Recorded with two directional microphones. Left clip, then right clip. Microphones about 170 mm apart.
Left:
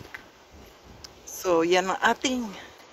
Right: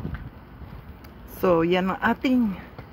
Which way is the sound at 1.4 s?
20° left (ahead or behind).